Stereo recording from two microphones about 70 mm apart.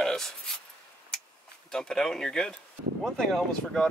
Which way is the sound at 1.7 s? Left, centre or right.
Centre.